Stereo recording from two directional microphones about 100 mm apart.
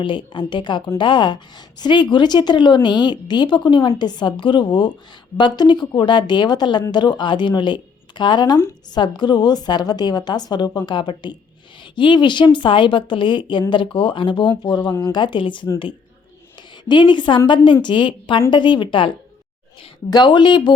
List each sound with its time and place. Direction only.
0.0 s speech: 55° left (ahead or behind)
16.9 s a woman's voice: 50° left (ahead or behind)
20.1 s speech: 45° left (ahead or behind)